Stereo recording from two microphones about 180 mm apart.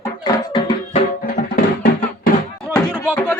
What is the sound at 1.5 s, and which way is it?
Music, 55° left (ahead or behind).